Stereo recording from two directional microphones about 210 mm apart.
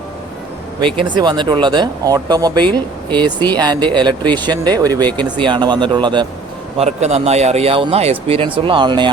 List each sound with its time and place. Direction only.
0.8 s speech: 25° right (ahead or behind)